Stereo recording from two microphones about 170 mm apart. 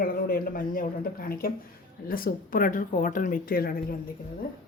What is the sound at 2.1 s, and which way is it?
Speech, 60° left (ahead or behind).